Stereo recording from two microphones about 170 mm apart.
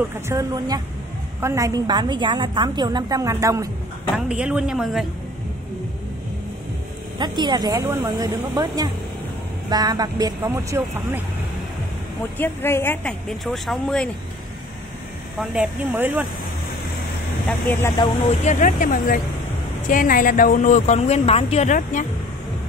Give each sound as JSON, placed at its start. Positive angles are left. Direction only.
{"t": 0.1, "sound": "a woman's voice", "side_deg": -15}
{"t": 4.2, "sound": "speech", "side_deg": -5}
{"t": 7.2, "sound": "a woman's voice", "side_deg": -25}
{"t": 12.4, "sound": "speech", "side_deg": 15}
{"t": 13.5, "sound": "speech", "side_deg": 0}
{"t": 15.3, "sound": "speech", "side_deg": -5}
{"t": 17.5, "sound": "speech", "side_deg": 10}
{"t": 18.4, "sound": "speech", "side_deg": 45}